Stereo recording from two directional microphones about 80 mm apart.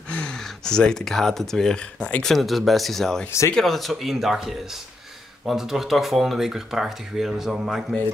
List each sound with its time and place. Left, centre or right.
0.1 s speech: centre
3.3 s speech: left
3.5 s speech: centre